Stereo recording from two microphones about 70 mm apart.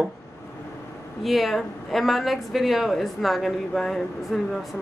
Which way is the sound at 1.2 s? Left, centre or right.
Centre.